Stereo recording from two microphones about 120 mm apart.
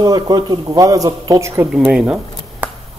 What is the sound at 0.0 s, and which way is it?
Speech, 35° right (ahead or behind).